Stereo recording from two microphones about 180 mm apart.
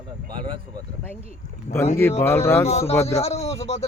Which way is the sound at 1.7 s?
45° left (ahead or behind).